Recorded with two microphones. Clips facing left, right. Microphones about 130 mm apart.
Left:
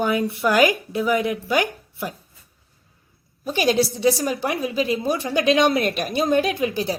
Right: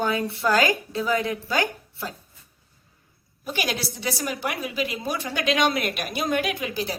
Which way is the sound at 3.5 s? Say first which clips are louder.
Left 10 dB; 25° left (ahead or behind).